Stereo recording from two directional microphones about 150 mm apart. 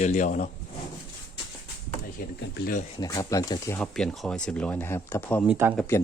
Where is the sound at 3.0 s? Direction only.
25° left (ahead or behind).